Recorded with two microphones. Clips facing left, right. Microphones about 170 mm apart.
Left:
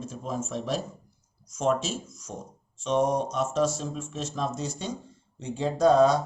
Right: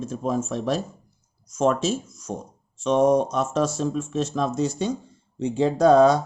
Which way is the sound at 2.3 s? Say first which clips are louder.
Right 7 dB; 75° right (ahead or behind).